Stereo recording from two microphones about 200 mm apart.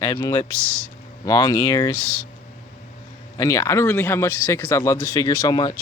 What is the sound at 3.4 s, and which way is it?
Speech, 15° left (ahead or behind).